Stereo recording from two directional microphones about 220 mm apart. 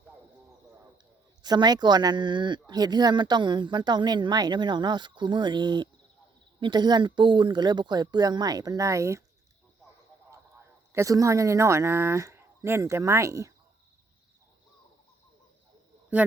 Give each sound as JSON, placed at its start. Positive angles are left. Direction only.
{"t": 1.4, "sound": "speech", "side_deg": -20}
{"t": 10.9, "sound": "speech", "side_deg": -15}